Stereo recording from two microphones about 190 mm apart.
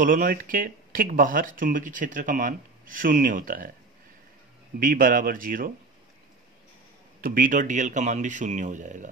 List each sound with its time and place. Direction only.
0.0 s speech: 45° right (ahead or behind)
4.7 s speech: 50° right (ahead or behind)
7.2 s speech: 45° right (ahead or behind)